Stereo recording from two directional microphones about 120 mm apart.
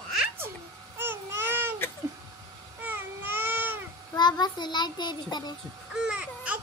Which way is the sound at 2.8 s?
15° right (ahead or behind).